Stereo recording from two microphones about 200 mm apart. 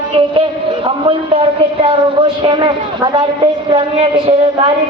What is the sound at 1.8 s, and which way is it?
A woman's voice, 25° right (ahead or behind).